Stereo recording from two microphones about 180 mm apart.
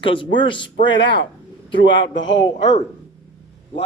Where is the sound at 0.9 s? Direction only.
85° left.